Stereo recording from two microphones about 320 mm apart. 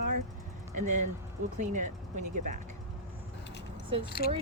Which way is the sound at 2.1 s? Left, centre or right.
Right.